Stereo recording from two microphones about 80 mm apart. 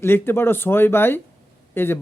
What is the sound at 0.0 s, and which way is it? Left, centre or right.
Speech, left.